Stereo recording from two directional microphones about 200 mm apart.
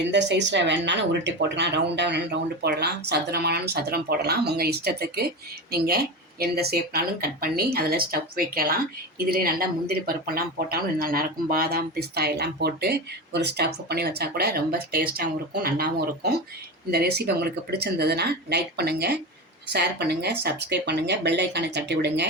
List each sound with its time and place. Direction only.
0.0 s speech: 60° right (ahead or behind)